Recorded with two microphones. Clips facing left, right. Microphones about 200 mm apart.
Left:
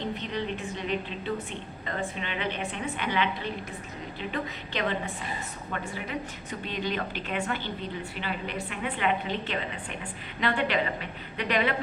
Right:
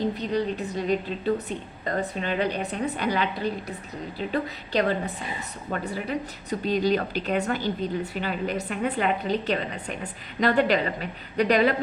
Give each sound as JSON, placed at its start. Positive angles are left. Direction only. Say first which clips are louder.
{"t": 0.0, "sound": "a woman's voice", "louder": "right 6 dB", "side_deg": -40}